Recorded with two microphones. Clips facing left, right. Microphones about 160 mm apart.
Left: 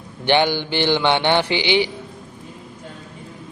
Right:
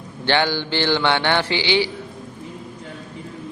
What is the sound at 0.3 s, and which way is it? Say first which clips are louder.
A man's voice: left 2 dB; 15° left (ahead or behind).